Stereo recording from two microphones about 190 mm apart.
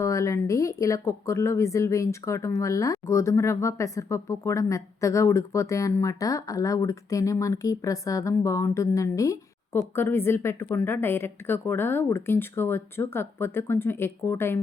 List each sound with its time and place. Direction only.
0.0 s speech: 15° left (ahead or behind)